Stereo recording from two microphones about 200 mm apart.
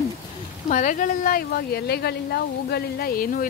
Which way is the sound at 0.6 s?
40° left (ahead or behind).